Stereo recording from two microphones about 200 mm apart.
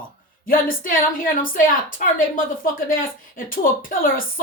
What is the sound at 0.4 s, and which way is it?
A woman's voice, 45° left (ahead or behind).